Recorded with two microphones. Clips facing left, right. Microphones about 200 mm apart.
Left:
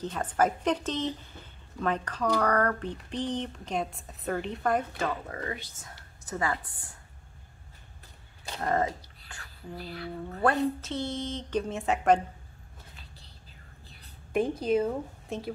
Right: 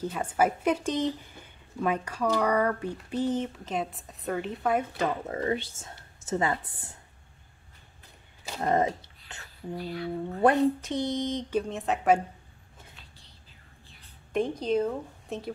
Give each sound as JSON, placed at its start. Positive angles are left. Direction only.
{"t": 0.0, "sound": "a woman's voice", "side_deg": -10}
{"t": 4.9, "sound": "speech", "side_deg": -20}
{"t": 8.5, "sound": "a sound", "side_deg": -20}
{"t": 9.9, "sound": "a woman's voice", "side_deg": -20}
{"t": 11.7, "sound": "speech", "side_deg": 0}
{"t": 14.3, "sound": "a woman's voice", "side_deg": 5}